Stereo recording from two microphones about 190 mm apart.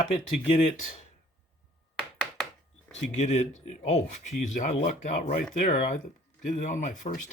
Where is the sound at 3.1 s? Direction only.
35° left (ahead or behind).